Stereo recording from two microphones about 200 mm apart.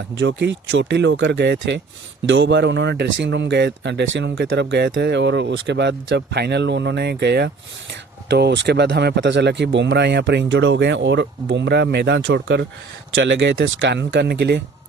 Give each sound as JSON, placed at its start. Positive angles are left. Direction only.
{"t": 0.1, "sound": "speech", "side_deg": -60}